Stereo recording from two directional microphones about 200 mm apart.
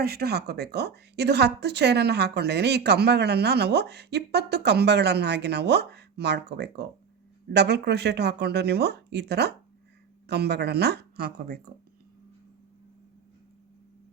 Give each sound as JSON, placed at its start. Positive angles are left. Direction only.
{"t": 0.0, "sound": "a woman's voice", "side_deg": -50}